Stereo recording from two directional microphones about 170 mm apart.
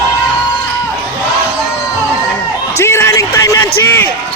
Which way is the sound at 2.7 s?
15° left (ahead or behind).